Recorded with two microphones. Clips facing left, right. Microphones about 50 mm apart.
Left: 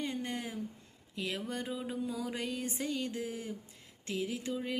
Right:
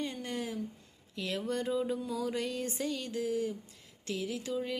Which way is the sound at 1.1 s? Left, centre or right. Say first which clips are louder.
Right 3 dB; centre.